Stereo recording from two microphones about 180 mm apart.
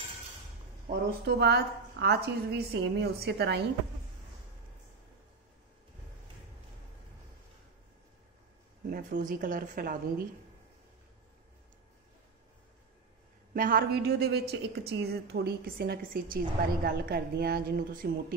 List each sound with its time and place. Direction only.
0.8 s a woman's voice: 65° right (ahead or behind)
8.8 s speech: 55° right (ahead or behind)
13.5 s a woman's voice: 55° right (ahead or behind)